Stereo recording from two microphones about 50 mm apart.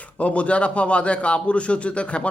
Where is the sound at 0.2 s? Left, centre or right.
Left.